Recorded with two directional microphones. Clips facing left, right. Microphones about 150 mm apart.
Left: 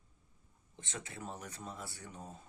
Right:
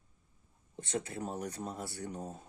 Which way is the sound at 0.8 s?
40° right (ahead or behind).